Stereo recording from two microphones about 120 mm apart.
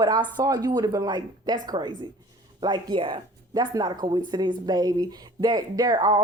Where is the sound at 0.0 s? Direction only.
35° right (ahead or behind).